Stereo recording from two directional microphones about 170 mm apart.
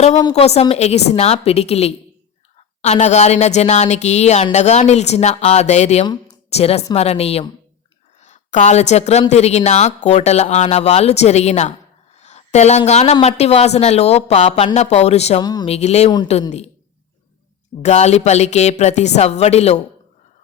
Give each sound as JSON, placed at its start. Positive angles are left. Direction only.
{"t": 0.3, "sound": "a woman's voice", "side_deg": 35}
{"t": 15.4, "sound": "speech", "side_deg": 25}
{"t": 15.6, "sound": "speech", "side_deg": 40}
{"t": 17.8, "sound": "speech", "side_deg": 40}